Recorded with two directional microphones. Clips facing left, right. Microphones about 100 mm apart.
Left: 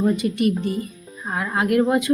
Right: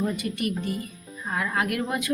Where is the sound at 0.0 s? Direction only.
25° left (ahead or behind).